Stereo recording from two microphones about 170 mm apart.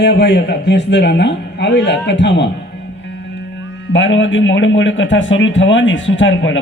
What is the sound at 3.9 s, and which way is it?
A man's voice, 90° left.